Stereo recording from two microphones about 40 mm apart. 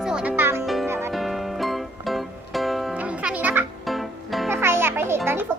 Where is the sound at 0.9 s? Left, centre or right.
Right.